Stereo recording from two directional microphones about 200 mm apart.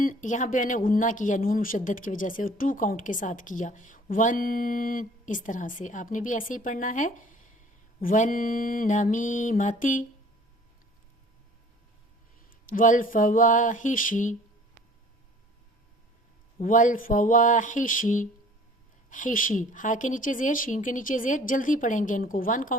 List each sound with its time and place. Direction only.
0.0 s speech: 40° left (ahead or behind)
12.5 s speech: 45° left (ahead or behind)
16.6 s speech: 40° left (ahead or behind)